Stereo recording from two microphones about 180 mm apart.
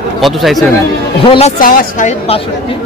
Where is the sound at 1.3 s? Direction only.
35° left (ahead or behind).